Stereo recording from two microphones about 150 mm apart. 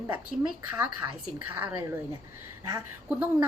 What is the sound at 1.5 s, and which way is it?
Speech, 10° right (ahead or behind).